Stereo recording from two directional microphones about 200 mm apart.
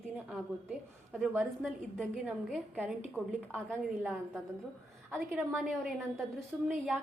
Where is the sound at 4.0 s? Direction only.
Centre (ahead or behind).